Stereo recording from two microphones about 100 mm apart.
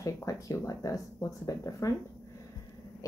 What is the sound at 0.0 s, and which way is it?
Speech, 35° left (ahead or behind).